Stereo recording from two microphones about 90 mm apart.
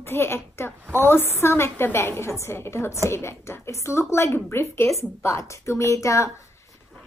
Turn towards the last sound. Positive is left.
turn(degrees=35)  # may be behind; listen again after turning